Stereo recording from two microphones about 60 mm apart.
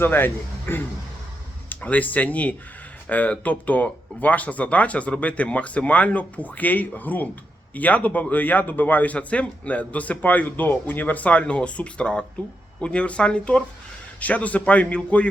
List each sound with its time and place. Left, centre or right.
0.0 s speech: left